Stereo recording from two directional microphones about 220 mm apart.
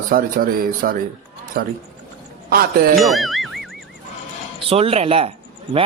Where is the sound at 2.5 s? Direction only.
45° right (ahead or behind).